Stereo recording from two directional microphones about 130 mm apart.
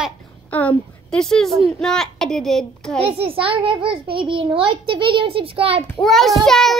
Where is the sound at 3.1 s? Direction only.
45° right (ahead or behind).